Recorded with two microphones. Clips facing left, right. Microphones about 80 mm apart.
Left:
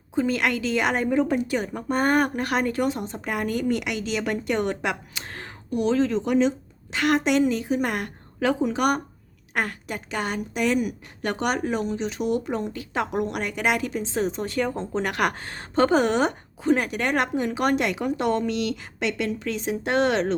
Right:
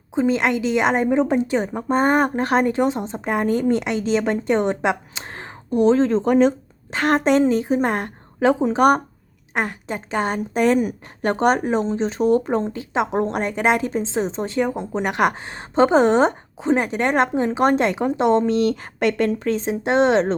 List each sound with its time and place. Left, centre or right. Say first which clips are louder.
0.1 s a woman's voice: right 4 dB; right
9.6 s a woman's voice: right 3 dB; right